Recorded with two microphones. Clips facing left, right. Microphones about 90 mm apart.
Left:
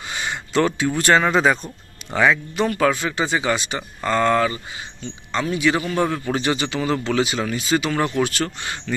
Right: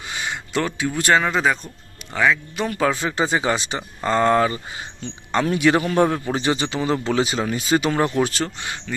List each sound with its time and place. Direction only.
0.1 s a sound: 5° right (ahead or behind)
0.9 s speech: 10° right (ahead or behind)
1.2 s speech: 5° left (ahead or behind)
2.5 s speech: 5° right (ahead or behind)
2.8 s speech: 20° right (ahead or behind)
3.2 s speech: 35° right (ahead or behind)
5.0 s speech: 50° right (ahead or behind)
6.2 s speech: 20° right (ahead or behind)
8.5 s speech: 5° right (ahead or behind)